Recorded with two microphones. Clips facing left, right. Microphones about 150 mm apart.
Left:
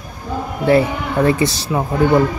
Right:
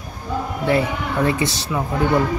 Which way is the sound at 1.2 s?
40° left (ahead or behind).